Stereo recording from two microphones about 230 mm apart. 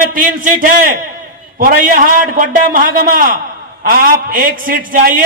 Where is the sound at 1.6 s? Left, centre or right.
Right.